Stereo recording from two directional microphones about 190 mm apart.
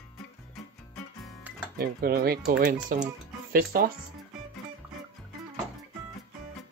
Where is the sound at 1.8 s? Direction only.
50° right (ahead or behind).